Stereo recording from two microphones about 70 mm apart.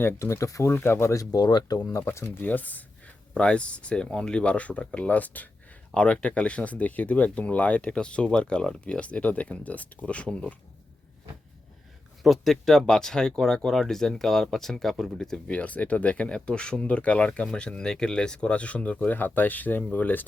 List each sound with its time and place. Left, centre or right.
0.0 s speech: left
0.7 s speech: left
1.1 s speech: left
2.0 s speech: left; by 10.5 s centre
12.2 s speech: centre
15.4 s speech: centre